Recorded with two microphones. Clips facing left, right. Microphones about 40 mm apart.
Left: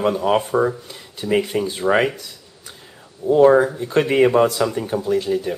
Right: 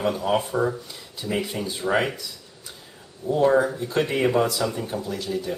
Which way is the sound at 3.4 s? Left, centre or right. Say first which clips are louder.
Left 6 dB; left.